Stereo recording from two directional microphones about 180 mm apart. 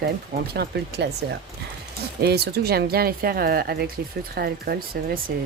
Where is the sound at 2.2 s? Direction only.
60° right (ahead or behind).